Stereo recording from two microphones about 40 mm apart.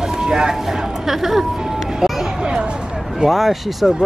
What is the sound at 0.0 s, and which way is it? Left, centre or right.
Speech, centre.